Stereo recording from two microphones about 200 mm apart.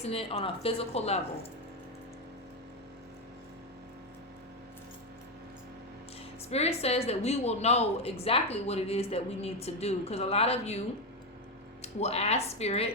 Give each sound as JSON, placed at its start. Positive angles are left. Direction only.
{"t": 0.0, "sound": "speech", "side_deg": 30}
{"t": 6.5, "sound": "a woman's voice", "side_deg": 30}
{"t": 11.8, "sound": "a woman's voice", "side_deg": 35}